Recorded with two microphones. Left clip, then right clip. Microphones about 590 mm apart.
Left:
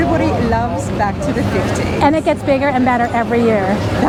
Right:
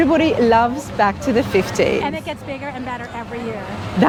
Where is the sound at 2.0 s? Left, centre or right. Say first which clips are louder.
Left 12 dB; left.